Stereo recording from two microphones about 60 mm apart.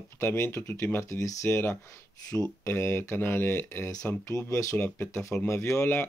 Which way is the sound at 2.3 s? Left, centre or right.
Left.